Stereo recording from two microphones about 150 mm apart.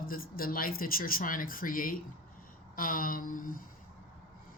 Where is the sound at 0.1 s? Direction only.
75° left (ahead or behind).